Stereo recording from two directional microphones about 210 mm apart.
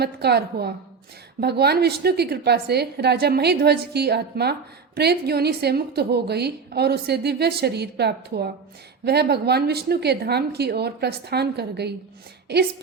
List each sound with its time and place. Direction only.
0.0 s a woman's voice: 50° right (ahead or behind)